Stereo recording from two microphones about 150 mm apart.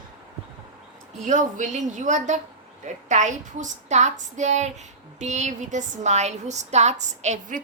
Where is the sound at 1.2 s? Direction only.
55° right (ahead or behind).